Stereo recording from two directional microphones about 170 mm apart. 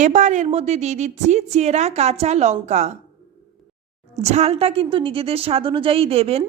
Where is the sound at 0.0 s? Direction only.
45° right (ahead or behind).